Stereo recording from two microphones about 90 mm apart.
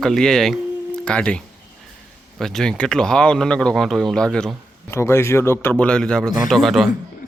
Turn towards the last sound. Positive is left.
turn(degrees=0)  # may be behind; listen again after turning